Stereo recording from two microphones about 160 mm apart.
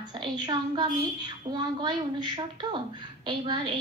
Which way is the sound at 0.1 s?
30° right (ahead or behind).